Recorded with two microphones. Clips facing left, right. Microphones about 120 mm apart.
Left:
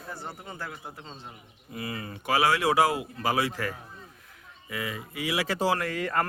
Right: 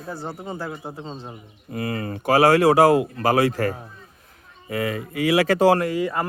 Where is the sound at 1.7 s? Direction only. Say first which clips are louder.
Right 9 dB; 50° right (ahead or behind).